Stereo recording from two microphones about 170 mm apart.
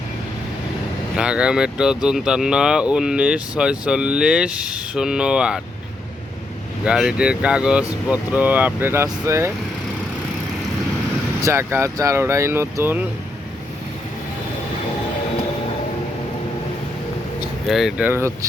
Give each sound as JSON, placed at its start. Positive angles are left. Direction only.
{"t": 1.1, "sound": "speech", "side_deg": -5}
{"t": 6.8, "sound": "speech", "side_deg": -5}
{"t": 11.3, "sound": "speech", "side_deg": -15}
{"t": 17.7, "sound": "speech", "side_deg": 0}